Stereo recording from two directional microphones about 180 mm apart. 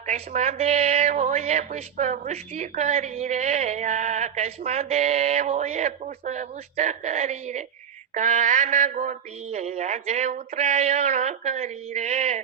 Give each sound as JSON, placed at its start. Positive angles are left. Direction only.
{"t": 0.0, "sound": "speech", "side_deg": -45}